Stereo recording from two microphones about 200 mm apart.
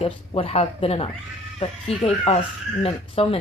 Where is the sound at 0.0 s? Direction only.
30° left (ahead or behind).